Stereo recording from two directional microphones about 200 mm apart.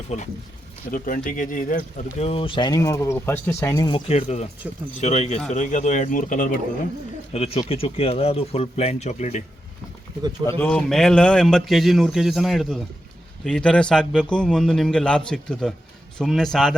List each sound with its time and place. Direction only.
0.9 s speech: 45° left (ahead or behind)
2.1 s speech: 30° left (ahead or behind)
4.1 s speech: 35° left (ahead or behind)
4.6 s speech: 10° right (ahead or behind)
4.9 s speech: 35° left (ahead or behind)
7.3 s speech: 30° left (ahead or behind)
10.6 s a man's voice: 5° left (ahead or behind)